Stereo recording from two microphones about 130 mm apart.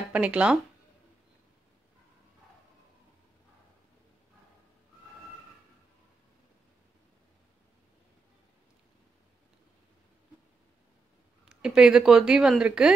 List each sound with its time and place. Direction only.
0.1 s speech: 10° right (ahead or behind)
11.4 s speech: 5° right (ahead or behind)